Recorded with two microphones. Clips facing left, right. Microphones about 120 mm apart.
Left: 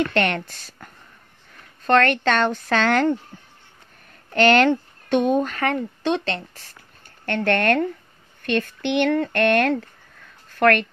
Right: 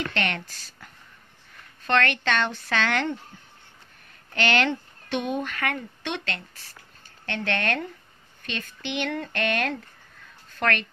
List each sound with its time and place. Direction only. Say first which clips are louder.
0.1 s a woman's voice: left 7 dB; 45° left (ahead or behind)
4.3 s speech: left 8 dB; 45° left (ahead or behind)
7.2 s a woman's voice: left 8 dB; 50° left (ahead or behind)